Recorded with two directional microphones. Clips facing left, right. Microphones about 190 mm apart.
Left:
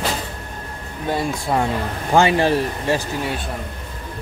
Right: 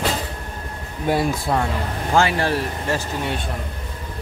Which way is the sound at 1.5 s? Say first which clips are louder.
Left 3 dB; 5° left (ahead or behind).